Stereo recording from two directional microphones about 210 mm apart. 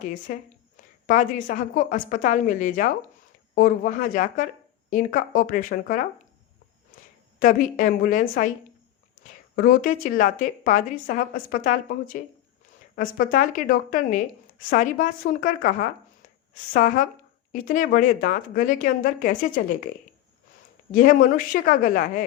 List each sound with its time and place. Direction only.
0.0 s a woman's voice: 40° left (ahead or behind)
7.3 s a woman's voice: 40° left (ahead or behind)
20.9 s a woman's voice: 40° left (ahead or behind)